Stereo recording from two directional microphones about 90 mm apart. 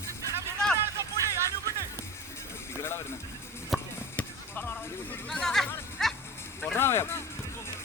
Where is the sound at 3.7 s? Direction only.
Centre (ahead or behind).